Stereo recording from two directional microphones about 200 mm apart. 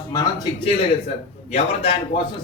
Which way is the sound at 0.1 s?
20° left (ahead or behind).